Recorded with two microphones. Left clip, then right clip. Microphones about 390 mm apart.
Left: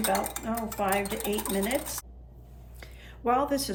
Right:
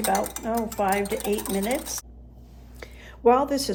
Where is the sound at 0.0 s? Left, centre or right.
Centre.